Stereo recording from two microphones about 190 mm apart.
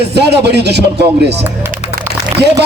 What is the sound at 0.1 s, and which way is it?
Speech, 60° right (ahead or behind).